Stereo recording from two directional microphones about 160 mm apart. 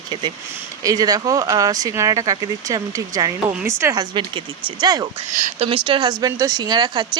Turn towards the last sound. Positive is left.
turn(degrees=-25)  # may be behind; listen again after turning